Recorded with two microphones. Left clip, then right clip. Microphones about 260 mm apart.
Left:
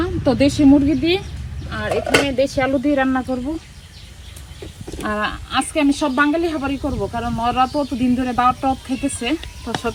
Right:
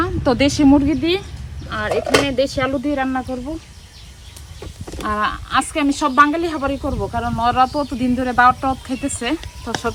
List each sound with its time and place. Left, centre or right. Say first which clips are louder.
0.0 s a sound: even; centre
0.6 s speech: left 2 dB; centre
2.6 s speech: left 2 dB; centre
4.9 s speech: right 2 dB; centre